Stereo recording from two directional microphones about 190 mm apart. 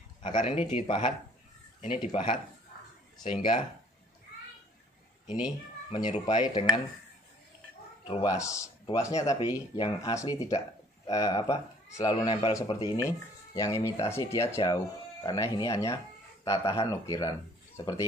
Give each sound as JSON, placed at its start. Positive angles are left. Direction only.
{"t": 0.2, "sound": "speech", "side_deg": 25}
{"t": 5.9, "sound": "speech", "side_deg": 25}
{"t": 8.1, "sound": "speech", "side_deg": 20}